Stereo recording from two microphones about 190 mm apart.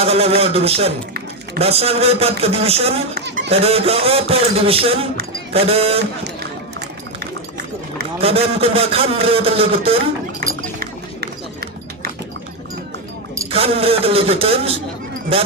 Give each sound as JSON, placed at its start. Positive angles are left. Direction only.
{"t": 0.0, "sound": "a man's voice", "side_deg": -30}
{"t": 8.2, "sound": "a man's voice", "side_deg": -30}
{"t": 10.8, "sound": "run", "side_deg": -55}
{"t": 13.5, "sound": "a man's voice", "side_deg": -30}